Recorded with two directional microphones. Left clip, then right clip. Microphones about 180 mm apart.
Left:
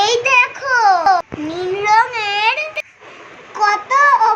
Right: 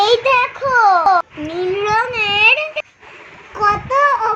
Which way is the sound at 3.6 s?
15° right (ahead or behind).